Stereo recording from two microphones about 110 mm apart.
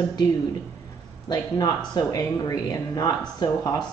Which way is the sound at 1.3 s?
35° left (ahead or behind).